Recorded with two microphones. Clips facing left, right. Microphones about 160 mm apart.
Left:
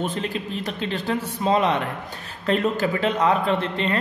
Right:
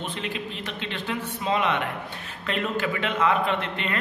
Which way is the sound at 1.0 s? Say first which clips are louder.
Left 5 dB; 35° left (ahead or behind).